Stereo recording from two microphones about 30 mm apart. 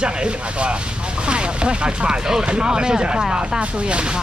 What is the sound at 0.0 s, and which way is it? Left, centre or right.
Speech, right.